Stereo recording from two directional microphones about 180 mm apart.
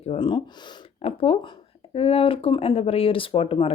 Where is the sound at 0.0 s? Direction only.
30° left (ahead or behind).